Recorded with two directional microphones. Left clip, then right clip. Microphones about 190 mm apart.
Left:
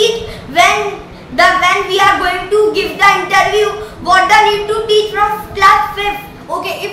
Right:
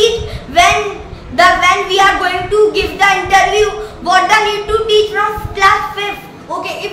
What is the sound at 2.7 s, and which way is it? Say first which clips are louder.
Child singing: left 1 dB; 15° right (ahead or behind).